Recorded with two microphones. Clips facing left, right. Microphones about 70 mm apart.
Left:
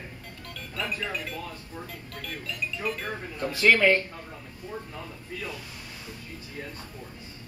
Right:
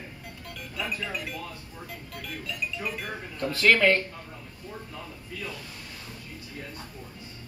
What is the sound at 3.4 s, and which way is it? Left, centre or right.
Speech, centre.